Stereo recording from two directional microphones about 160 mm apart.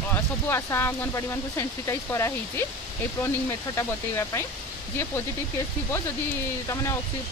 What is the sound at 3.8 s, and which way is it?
Speech, 15° left (ahead or behind).